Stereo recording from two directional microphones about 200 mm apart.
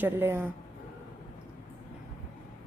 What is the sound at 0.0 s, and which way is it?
Speech, 10° right (ahead or behind).